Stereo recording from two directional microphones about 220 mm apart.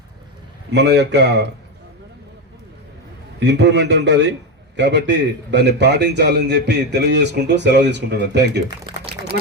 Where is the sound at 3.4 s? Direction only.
50° right (ahead or behind).